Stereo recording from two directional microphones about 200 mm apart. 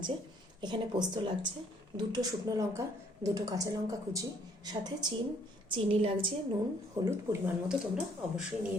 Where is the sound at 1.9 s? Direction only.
20° right (ahead or behind).